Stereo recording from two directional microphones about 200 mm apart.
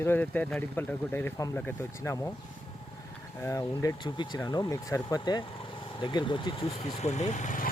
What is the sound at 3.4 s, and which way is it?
Speech, 15° left (ahead or behind).